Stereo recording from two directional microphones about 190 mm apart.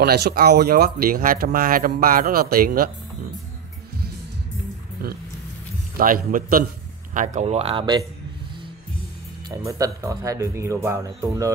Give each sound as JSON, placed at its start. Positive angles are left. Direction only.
{"t": 0.0, "sound": "speech", "side_deg": -55}
{"t": 5.9, "sound": "speech", "side_deg": -45}
{"t": 7.3, "sound": "speech", "side_deg": -35}
{"t": 9.7, "sound": "speech", "side_deg": -15}